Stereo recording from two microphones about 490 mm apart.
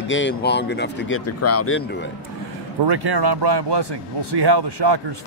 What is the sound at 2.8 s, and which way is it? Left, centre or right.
Speech, right.